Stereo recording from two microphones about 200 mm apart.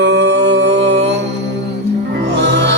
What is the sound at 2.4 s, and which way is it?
Music, 60° right (ahead or behind).